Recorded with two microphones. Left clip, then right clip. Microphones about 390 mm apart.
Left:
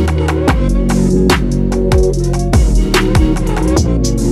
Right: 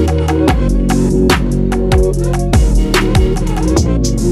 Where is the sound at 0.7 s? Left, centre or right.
Centre.